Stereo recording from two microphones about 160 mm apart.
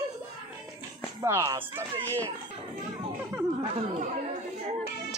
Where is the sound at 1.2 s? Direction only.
20° right (ahead or behind).